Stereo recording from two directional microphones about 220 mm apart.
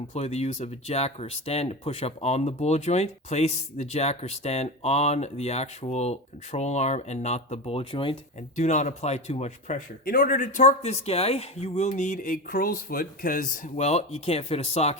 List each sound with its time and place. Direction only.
0.1 s speech: 30° left (ahead or behind)